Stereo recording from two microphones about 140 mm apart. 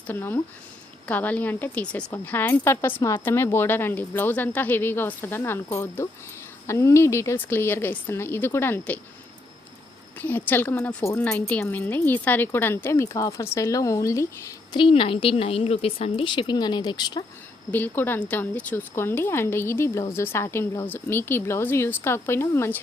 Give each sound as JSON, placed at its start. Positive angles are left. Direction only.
{"t": 0.1, "sound": "speech", "side_deg": 15}
{"t": 10.2, "sound": "a woman's voice", "side_deg": 15}
{"t": 14.8, "sound": "a woman's voice", "side_deg": 40}
{"t": 17.7, "sound": "speech", "side_deg": 15}